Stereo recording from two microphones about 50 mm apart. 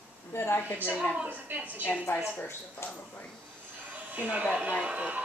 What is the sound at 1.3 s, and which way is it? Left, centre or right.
Speech, right.